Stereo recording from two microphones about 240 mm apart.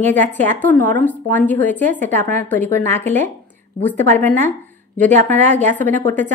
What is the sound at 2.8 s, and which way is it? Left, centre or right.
Speech, right.